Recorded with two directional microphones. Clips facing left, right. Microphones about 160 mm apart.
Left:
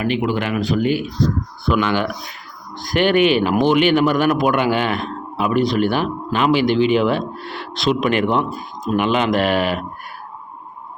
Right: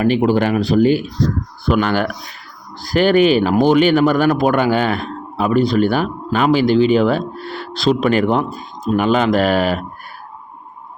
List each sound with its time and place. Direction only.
0.0 s speech: 40° right (ahead or behind)